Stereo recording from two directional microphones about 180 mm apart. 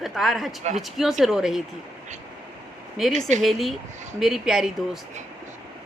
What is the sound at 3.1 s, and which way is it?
Speech, 40° right (ahead or behind).